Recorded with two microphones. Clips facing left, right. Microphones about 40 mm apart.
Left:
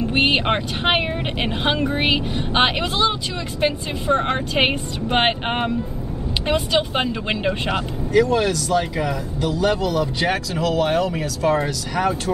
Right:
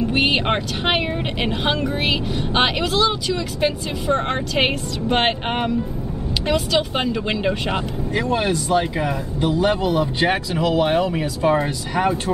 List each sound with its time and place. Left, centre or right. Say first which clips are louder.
0.1 s speech: left 3 dB; centre
6.4 s speech: even; left
7.0 s speech: right 1 dB; centre
8.1 s speech: left 4 dB; right